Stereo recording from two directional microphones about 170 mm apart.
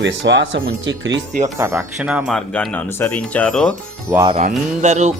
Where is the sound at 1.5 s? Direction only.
15° right (ahead or behind).